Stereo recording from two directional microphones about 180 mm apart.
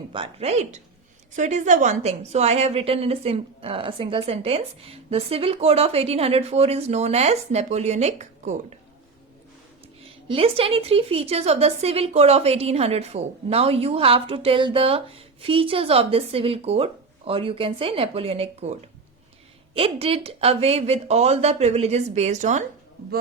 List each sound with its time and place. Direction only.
0.1 s a woman's voice: 30° right (ahead or behind)
10.2 s a woman's voice: 30° right (ahead or behind)